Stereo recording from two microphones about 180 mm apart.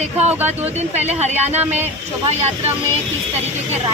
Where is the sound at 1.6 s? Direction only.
10° right (ahead or behind).